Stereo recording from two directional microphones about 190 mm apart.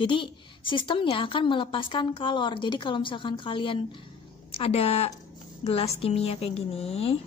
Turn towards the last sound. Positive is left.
turn(degrees=30)  # may be behind; listen again after turning